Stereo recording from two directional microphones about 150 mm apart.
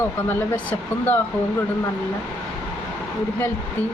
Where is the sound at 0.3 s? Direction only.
10° left (ahead or behind).